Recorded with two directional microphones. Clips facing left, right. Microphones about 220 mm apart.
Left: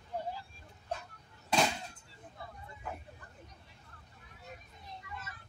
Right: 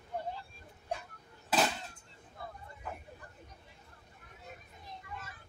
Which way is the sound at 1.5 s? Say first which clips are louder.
Even; 5° right (ahead or behind).